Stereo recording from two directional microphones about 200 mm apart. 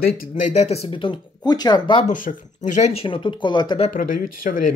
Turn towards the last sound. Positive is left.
turn(degrees=45)  # may be behind; listen again after turning